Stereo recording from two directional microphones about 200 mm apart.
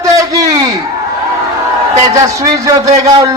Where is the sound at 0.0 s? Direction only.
15° right (ahead or behind).